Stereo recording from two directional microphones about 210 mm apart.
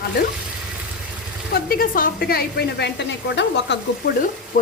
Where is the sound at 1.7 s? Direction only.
45° left (ahead or behind).